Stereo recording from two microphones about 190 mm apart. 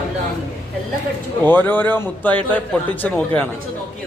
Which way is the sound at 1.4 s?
10° left (ahead or behind).